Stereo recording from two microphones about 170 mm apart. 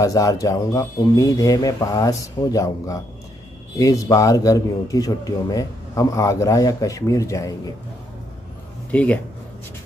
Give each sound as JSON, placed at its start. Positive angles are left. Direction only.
{"t": 0.0, "sound": "a man's voice", "side_deg": 20}
{"t": 8.9, "sound": "speech", "side_deg": 10}